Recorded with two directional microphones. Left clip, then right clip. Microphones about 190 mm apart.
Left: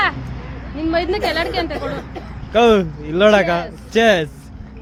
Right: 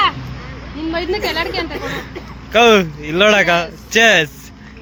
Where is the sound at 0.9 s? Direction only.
25° left (ahead or behind).